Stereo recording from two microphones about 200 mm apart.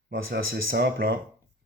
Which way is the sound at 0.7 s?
50° right (ahead or behind).